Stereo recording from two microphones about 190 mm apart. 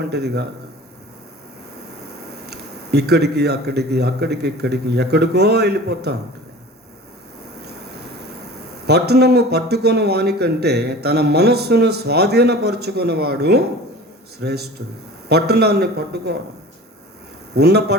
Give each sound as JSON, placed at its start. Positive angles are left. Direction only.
{"t": 0.0, "sound": "a man's voice", "side_deg": -60}
{"t": 2.5, "sound": "a man's voice", "side_deg": -60}
{"t": 8.9, "sound": "a man's voice", "side_deg": -60}
{"t": 17.5, "sound": "a man's voice", "side_deg": -60}